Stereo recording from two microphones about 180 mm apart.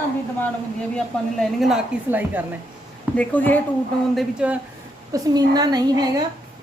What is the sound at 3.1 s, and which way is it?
Speech, 10° left (ahead or behind).